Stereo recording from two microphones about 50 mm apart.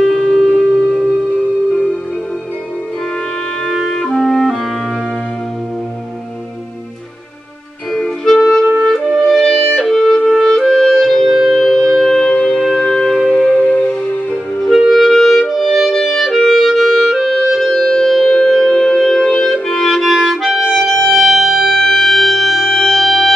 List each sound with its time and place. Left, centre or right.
0.0 s music: centre
3.9 s clarinet: centre
7.9 s music: centre
10.2 s clarinet: centre
11.5 s music: centre
12.5 s music: centre
12.8 s music: centre
13.7 s music: left
14.9 s clarinet: centre
17.5 s music: centre
21.7 s music: centre